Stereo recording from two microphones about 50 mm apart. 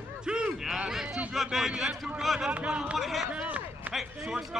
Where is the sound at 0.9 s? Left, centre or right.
Centre.